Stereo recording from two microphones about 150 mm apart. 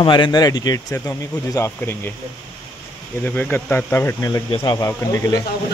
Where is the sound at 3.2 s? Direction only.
10° left (ahead or behind).